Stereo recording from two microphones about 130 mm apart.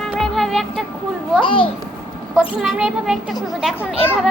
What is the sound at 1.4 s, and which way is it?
Speech, 40° left (ahead or behind).